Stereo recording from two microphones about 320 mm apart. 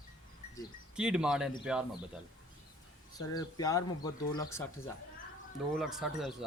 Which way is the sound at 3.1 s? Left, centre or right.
Centre.